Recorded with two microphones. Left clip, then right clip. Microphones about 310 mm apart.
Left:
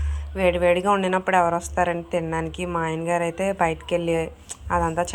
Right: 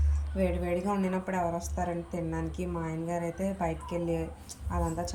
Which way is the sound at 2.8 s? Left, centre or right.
Left.